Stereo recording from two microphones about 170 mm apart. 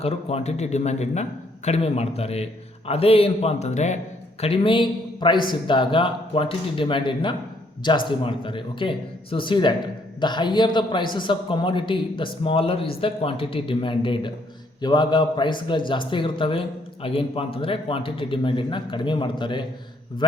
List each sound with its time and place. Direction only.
0.0 s a man's voice: 35° left (ahead or behind)